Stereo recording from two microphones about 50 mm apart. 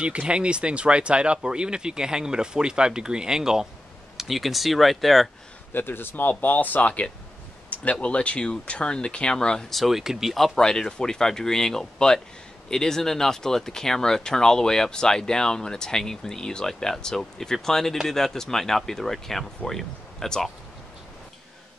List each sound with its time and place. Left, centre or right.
0.0 s speech: right; by 5.3 s centre
5.7 s speech: left; by 9.7 s centre
9.7 s speech: centre
10.6 s speech: centre